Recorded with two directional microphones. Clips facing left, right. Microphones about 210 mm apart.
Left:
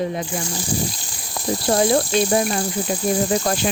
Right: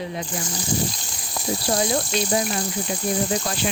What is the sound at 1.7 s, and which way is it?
Speech, 55° left (ahead or behind).